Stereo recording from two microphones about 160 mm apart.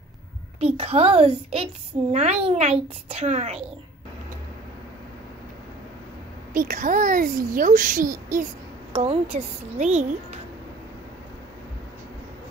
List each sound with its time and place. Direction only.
0.6 s a child's voice: 40° right (ahead or behind)
6.5 s a child's voice: 55° right (ahead or behind)
8.9 s speech: 40° right (ahead or behind)